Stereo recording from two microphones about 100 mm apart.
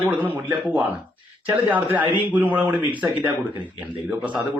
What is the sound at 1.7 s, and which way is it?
A man's voice, 15° right (ahead or behind).